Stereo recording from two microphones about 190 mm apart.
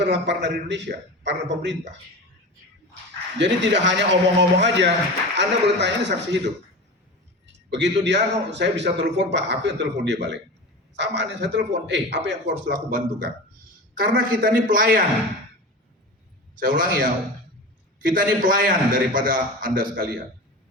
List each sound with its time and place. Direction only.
0.0 s a man's voice: 65° right (ahead or behind)
3.3 s a man's voice: 70° right (ahead or behind)
12.7 s a man's voice: 45° right (ahead or behind)
16.6 s a man's voice: 45° right (ahead or behind)